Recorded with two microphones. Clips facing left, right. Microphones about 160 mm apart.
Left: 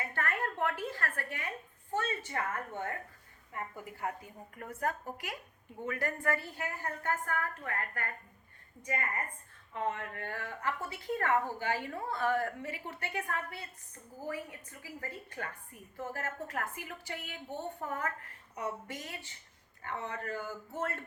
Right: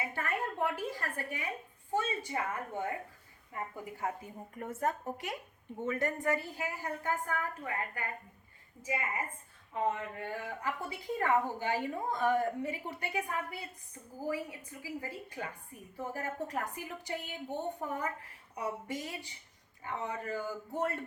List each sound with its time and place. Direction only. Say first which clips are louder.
0.0 s a woman's voice: even; 10° right (ahead or behind)